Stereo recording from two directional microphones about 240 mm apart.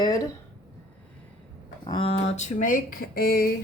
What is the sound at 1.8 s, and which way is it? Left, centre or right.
Speech, left.